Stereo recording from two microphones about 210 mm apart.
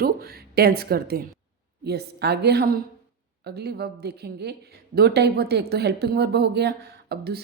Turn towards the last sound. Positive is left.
turn(degrees=-50)  # may be behind; listen again after turning